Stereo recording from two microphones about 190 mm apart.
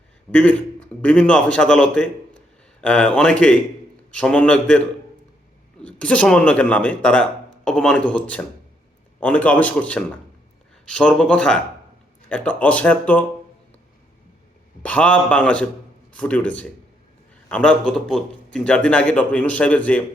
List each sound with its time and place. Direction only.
0.3 s a man's voice: 10° left (ahead or behind)
5.8 s a man's voice: 5° left (ahead or behind)
14.8 s speech: 5° left (ahead or behind)